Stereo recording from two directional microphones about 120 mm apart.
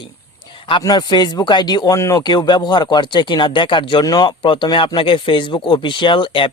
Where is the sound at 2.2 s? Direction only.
35° left (ahead or behind).